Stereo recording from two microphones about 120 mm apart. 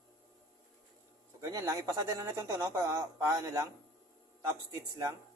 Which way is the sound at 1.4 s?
25° right (ahead or behind).